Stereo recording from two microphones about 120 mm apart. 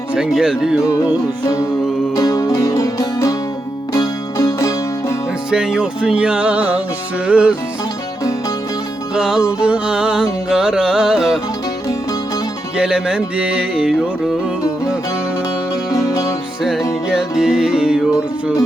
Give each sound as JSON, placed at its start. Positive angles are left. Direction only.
{"t": 0.1, "sound": "speech", "side_deg": -5}
{"t": 0.8, "sound": "music", "side_deg": 25}
{"t": 2.1, "sound": "music", "side_deg": 30}
{"t": 5.5, "sound": "music", "side_deg": -5}
{"t": 9.1, "sound": "music", "side_deg": -5}
{"t": 12.7, "sound": "music", "side_deg": -5}
{"t": 15.9, "sound": "music", "side_deg": 25}
{"t": 17.1, "sound": "music", "side_deg": -5}